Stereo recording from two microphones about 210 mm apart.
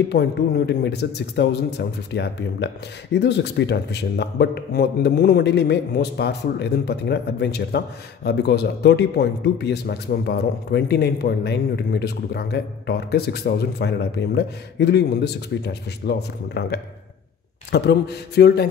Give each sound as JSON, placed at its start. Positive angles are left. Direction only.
{"t": 0.1, "sound": "a man's voice", "side_deg": 55}